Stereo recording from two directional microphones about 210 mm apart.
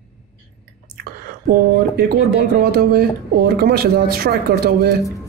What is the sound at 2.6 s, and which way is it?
Speech, 50° right (ahead or behind).